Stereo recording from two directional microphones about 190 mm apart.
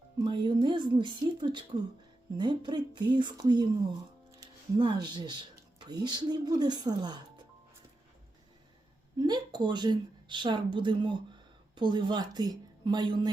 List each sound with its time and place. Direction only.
0.3 s a woman's voice: 25° right (ahead or behind)
9.1 s a woman's voice: 20° right (ahead or behind)